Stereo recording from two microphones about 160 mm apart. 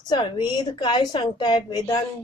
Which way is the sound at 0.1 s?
25° left (ahead or behind).